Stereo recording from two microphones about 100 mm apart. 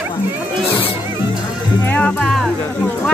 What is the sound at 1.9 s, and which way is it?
Speech, 10° left (ahead or behind).